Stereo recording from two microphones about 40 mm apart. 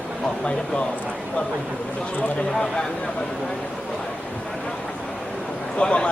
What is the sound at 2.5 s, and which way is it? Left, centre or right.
Speech, left.